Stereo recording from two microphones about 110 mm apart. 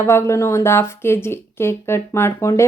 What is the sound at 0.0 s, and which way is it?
Speech, 25° left (ahead or behind).